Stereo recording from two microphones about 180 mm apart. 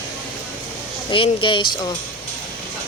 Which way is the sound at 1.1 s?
25° left (ahead or behind).